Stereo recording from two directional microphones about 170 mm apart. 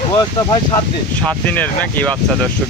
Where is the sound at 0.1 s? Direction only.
25° left (ahead or behind).